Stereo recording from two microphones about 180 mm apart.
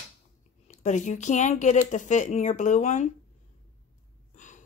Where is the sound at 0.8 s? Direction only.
40° left (ahead or behind).